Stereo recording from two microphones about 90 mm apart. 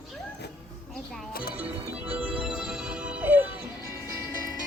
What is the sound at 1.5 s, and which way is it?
Music, 15° right (ahead or behind).